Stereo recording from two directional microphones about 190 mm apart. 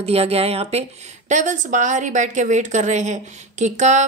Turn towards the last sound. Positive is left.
turn(degrees=-40)  # may be behind; listen again after turning